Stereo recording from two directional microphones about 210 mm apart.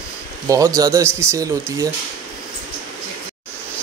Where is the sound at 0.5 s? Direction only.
15° right (ahead or behind).